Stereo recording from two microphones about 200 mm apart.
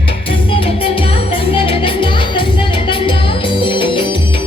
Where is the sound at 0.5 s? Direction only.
25° left (ahead or behind).